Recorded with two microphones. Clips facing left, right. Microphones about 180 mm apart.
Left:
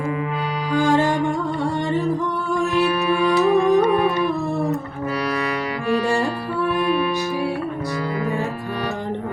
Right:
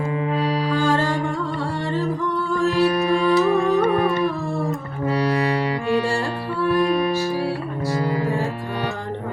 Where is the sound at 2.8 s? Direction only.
35° right (ahead or behind).